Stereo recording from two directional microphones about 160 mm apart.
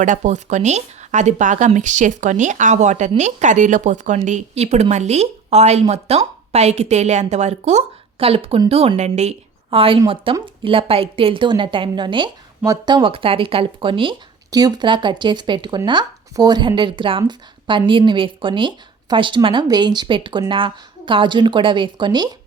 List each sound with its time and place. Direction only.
0.0 s a woman's voice: 50° right (ahead or behind); by 22.4 s 25° right (ahead or behind)